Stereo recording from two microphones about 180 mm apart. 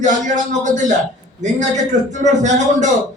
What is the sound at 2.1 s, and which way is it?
Speech, 40° right (ahead or behind).